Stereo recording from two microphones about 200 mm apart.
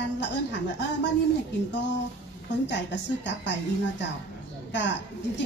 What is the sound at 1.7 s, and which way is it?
A woman's voice, 65° left (ahead or behind).